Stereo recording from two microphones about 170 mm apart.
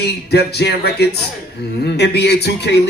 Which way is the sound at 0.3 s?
75° left (ahead or behind).